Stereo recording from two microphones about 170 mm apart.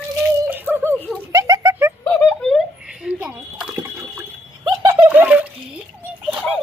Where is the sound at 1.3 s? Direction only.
20° right (ahead or behind).